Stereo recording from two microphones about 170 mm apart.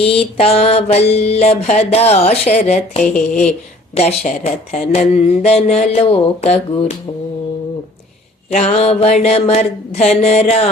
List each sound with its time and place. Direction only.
0.1 s mantra: 35° left (ahead or behind)
8.4 s mantra: 40° left (ahead or behind)